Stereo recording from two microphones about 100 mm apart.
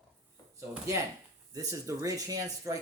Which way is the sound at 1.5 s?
35° right (ahead or behind).